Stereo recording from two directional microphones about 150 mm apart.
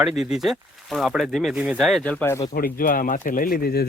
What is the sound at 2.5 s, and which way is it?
Speech, 75° left (ahead or behind).